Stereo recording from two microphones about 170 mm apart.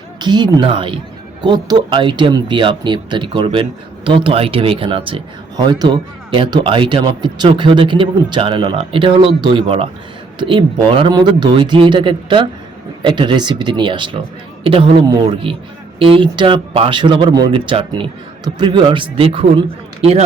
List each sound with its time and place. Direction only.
0.2 s a man's voice: 25° right (ahead or behind)